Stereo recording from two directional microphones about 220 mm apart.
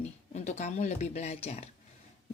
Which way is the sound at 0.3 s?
30° left (ahead or behind).